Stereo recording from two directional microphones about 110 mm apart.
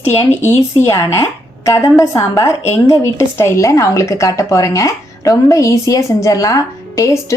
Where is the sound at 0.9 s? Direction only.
25° left (ahead or behind).